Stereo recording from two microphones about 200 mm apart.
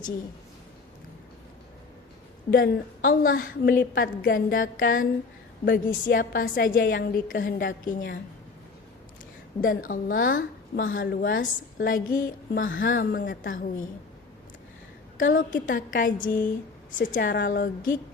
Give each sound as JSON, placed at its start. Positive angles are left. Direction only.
{"t": 2.5, "sound": "a woman's voice", "side_deg": 45}
{"t": 9.6, "sound": "a woman's voice", "side_deg": 45}
{"t": 15.2, "sound": "a woman's voice", "side_deg": 40}